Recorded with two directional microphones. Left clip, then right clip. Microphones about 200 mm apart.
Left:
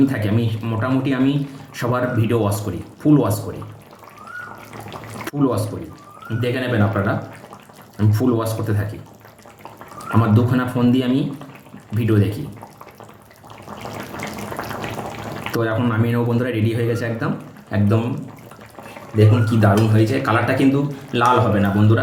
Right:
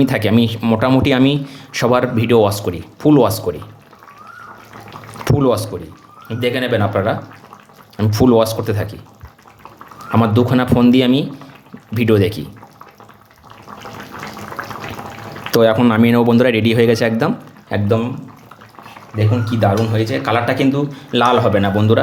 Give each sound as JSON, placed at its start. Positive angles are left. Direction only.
{"t": 0.0, "sound": "speech", "side_deg": -55}
{"t": 5.2, "sound": "a sound", "side_deg": -55}
{"t": 6.4, "sound": "speech", "side_deg": -55}
{"t": 10.2, "sound": "speech", "side_deg": -50}
{"t": 15.5, "sound": "speech", "side_deg": -55}
{"t": 19.1, "sound": "speech", "side_deg": -45}